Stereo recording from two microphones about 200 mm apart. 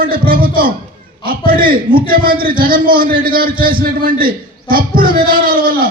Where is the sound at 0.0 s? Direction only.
45° right (ahead or behind).